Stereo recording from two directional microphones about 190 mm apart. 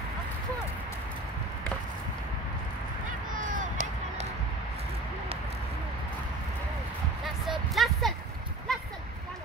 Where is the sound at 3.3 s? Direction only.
45° right (ahead or behind).